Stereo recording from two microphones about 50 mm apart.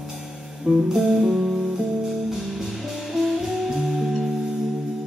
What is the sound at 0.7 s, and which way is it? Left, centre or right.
Music, centre.